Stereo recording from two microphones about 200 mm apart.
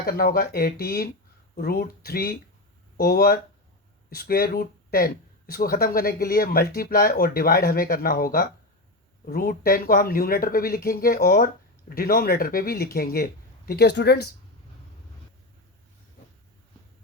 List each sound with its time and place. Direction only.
0.0 s speech: 50° left (ahead or behind)